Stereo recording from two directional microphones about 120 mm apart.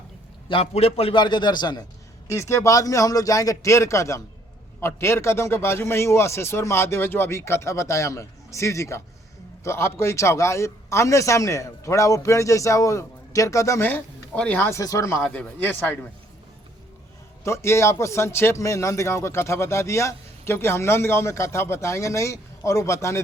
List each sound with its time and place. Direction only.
0.4 s a man's voice: 45° left (ahead or behind)
0.7 s a man's voice: 60° left (ahead or behind)
1.1 s speech: 40° left (ahead or behind)
2.2 s speech: 25° left (ahead or behind)
14.8 s speech: 25° left (ahead or behind)
15.2 s speech: 10° left (ahead or behind)
17.4 s speech: 25° left (ahead or behind)